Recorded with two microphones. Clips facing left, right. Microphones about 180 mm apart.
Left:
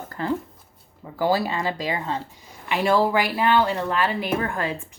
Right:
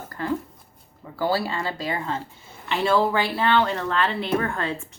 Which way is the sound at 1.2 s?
20° left (ahead or behind).